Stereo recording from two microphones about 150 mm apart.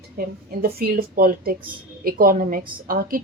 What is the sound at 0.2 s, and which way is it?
Speech, 90° right.